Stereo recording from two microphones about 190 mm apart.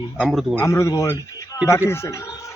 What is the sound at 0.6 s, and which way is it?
Speech, 15° left (ahead or behind).